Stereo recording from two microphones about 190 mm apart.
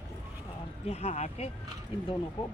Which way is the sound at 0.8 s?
35° left (ahead or behind).